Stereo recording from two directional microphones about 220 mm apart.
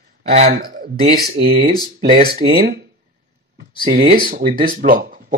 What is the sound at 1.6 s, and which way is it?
Speech, 30° right (ahead or behind).